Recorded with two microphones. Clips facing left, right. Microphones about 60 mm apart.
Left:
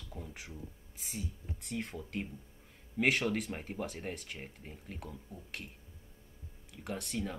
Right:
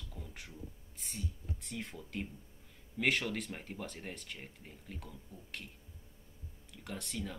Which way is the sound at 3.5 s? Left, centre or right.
Centre.